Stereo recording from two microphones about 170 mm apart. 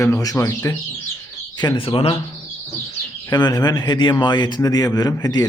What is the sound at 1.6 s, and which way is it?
Speech, 30° left (ahead or behind).